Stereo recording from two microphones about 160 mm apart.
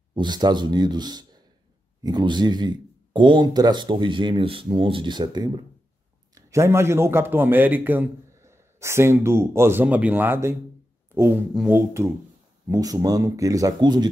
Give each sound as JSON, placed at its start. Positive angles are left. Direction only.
{"t": 0.1, "sound": "a man's voice", "side_deg": -25}
{"t": 12.6, "sound": "speech", "side_deg": -20}